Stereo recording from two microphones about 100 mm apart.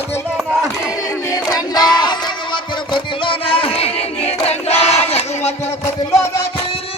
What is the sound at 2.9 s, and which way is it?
Music, 55° left (ahead or behind).